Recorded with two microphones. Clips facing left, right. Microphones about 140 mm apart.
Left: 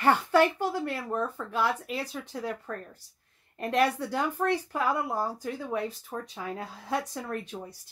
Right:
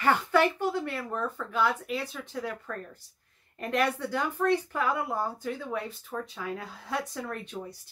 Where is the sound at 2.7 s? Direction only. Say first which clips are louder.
Even; 30° left (ahead or behind).